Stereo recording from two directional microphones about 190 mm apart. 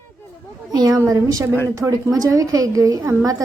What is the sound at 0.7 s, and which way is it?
A woman's voice, 20° right (ahead or behind).